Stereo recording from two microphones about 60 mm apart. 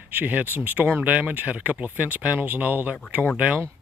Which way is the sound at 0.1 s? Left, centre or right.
Right.